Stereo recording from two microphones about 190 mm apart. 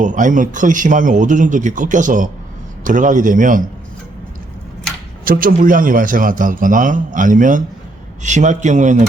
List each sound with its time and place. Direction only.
0.0 s speech: 40° right (ahead or behind)
5.2 s a man's voice: 50° right (ahead or behind)